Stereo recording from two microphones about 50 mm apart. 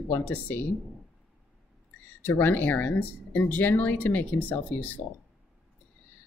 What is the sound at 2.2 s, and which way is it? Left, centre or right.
Speech, left.